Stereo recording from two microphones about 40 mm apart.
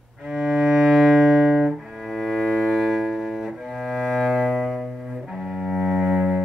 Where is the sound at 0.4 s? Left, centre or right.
Right.